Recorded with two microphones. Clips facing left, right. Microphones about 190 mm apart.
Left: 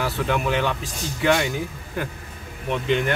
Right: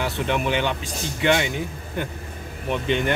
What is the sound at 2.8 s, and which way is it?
Speech, centre (ahead or behind).